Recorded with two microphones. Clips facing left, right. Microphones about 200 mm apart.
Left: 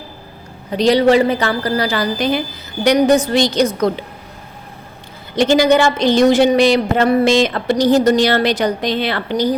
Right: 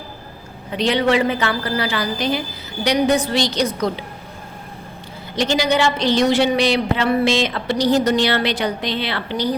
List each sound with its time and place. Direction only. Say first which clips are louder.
0.7 s a woman's voice: left 6 dB; 40° left (ahead or behind)
5.4 s a woman's voice: left 6 dB; 50° left (ahead or behind)